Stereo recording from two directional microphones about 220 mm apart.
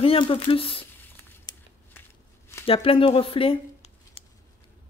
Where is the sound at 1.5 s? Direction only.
20° left (ahead or behind).